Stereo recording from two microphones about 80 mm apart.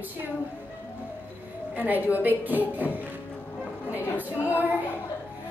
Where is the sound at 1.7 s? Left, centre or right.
Right.